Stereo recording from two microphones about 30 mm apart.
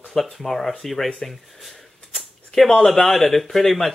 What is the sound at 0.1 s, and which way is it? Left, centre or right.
Speech, centre.